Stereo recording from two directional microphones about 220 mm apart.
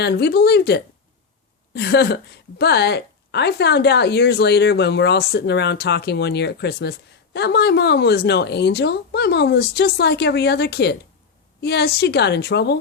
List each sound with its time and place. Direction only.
0.0 s a woman's voice: 50° left (ahead or behind)